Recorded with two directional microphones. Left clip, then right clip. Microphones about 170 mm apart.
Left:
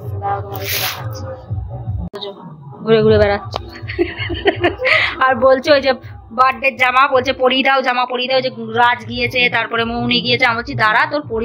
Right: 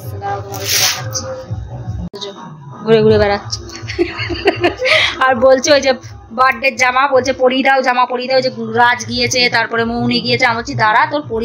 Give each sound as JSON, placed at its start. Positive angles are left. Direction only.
{"t": 2.8, "sound": "speech", "side_deg": -5}